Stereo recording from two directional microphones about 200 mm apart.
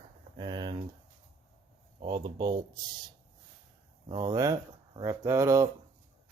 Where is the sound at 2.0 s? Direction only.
20° right (ahead or behind).